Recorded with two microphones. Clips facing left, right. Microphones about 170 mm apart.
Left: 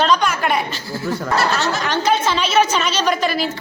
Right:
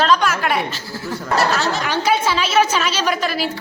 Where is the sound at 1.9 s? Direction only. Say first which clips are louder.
Left 1 dB; 10° right (ahead or behind).